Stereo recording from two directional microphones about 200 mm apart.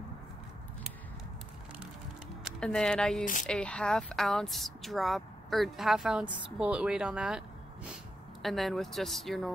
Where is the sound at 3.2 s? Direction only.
40° left (ahead or behind).